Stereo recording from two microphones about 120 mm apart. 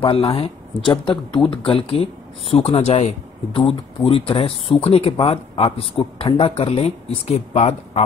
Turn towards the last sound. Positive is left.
turn(degrees=65)  # may be behind; listen again after turning